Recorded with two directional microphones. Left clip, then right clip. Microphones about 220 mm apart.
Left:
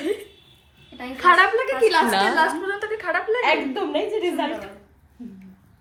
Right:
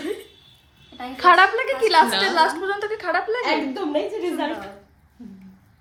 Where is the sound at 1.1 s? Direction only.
50° right (ahead or behind).